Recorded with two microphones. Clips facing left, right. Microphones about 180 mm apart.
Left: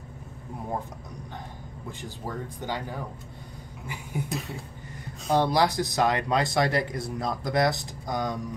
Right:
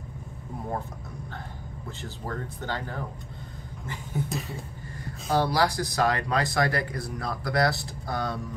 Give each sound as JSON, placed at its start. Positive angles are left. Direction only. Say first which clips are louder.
{"t": 1.9, "sound": "speech", "louder": "even", "side_deg": 15}
{"t": 4.3, "sound": "a sound", "louder": "even", "side_deg": 0}
{"t": 4.9, "sound": "speech", "louder": "left 1 dB", "side_deg": 20}